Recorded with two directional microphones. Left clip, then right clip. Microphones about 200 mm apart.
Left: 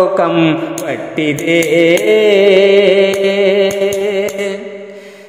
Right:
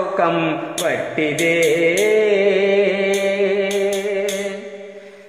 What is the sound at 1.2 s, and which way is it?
Music, 50° left (ahead or behind).